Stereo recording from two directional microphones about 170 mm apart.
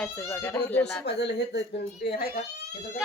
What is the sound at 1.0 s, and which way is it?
A woman's voice, 85° left.